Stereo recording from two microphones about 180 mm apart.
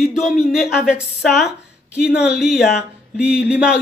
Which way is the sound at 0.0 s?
Centre (ahead or behind).